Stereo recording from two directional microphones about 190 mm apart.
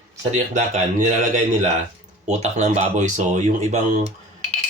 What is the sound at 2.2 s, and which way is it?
Speech, 40° right (ahead or behind).